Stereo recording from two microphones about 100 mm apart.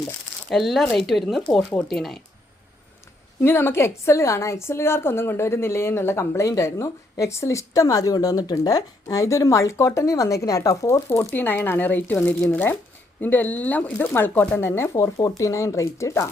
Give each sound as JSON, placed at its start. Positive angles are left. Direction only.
{"t": 0.5, "sound": "speech", "side_deg": 0}
{"t": 3.4, "sound": "a woman's voice", "side_deg": 25}